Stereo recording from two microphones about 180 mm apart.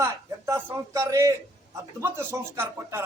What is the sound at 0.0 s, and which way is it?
A man's voice, 15° right (ahead or behind).